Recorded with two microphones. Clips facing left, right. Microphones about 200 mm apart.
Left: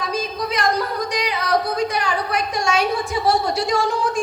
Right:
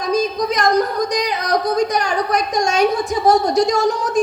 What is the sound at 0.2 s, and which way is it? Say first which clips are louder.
A woman's voice: right 5 dB; 40° right (ahead or behind).